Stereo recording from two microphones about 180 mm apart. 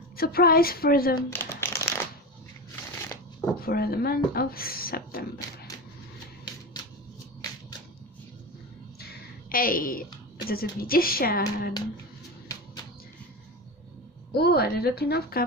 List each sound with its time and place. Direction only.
0.2 s speech: 55° left (ahead or behind)
1.3 s crumpling: 10° left (ahead or behind)
3.6 s speech: 60° left (ahead or behind)
6.4 s a sound: 25° left (ahead or behind)
9.0 s a sound: 50° left (ahead or behind)
10.5 s speech: 55° left (ahead or behind)
14.3 s speech: 60° left (ahead or behind)